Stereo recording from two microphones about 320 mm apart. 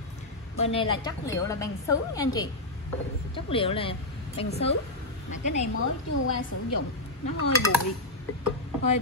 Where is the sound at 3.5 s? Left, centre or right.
Centre.